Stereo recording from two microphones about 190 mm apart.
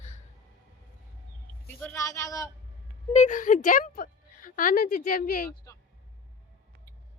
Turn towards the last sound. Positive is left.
turn(degrees=50)  # may be behind; listen again after turning